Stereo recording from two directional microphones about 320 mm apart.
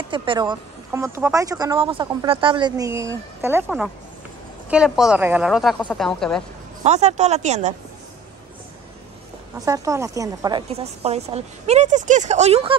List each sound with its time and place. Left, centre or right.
0.1 s a woman's voice: centre
6.8 s speech: right
9.7 s speech: centre